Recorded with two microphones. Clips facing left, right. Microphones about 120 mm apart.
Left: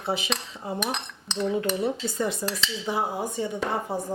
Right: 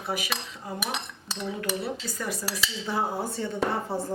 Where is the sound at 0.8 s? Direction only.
5° right (ahead or behind).